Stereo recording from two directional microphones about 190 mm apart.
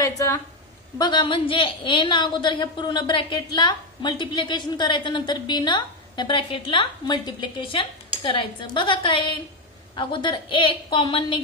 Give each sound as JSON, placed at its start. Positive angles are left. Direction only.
{"t": 0.0, "sound": "a woman's voice", "side_deg": 15}